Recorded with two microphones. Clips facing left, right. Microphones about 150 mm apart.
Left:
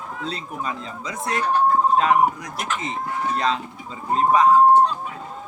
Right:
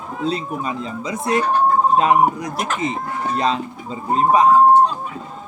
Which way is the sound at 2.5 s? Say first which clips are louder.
Right 4 dB; 40° right (ahead or behind).